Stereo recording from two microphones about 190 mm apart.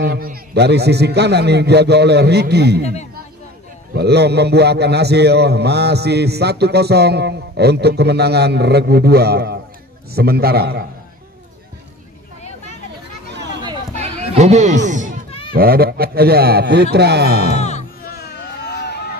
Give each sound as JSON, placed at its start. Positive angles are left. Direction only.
{"t": 0.0, "sound": "a man's voice", "side_deg": -55}
{"t": 2.8, "sound": "speech", "side_deg": 35}
{"t": 3.9, "sound": "a man's voice", "side_deg": -60}
{"t": 13.9, "sound": "chatter", "side_deg": -35}
{"t": 14.9, "sound": "a sound", "side_deg": -40}
{"t": 15.5, "sound": "a man's voice", "side_deg": -55}
{"t": 17.6, "sound": "music", "side_deg": 35}
{"t": 18.0, "sound": "a sound", "side_deg": 55}